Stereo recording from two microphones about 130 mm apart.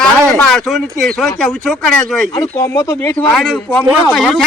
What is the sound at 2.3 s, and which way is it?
Speech, 25° left (ahead or behind).